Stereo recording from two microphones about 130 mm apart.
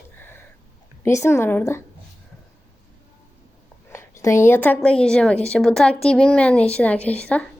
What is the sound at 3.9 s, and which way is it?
A woman's voice, 25° left (ahead or behind).